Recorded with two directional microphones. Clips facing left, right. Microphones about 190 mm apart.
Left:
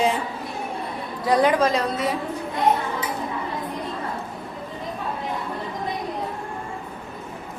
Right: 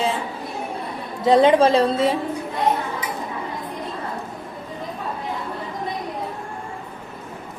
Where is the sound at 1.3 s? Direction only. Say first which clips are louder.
Right 5 dB; 25° right (ahead or behind).